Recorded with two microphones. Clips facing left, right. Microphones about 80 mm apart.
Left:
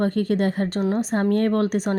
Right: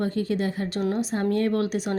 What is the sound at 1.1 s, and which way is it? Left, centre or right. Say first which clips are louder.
Speech: left 4 dB; left.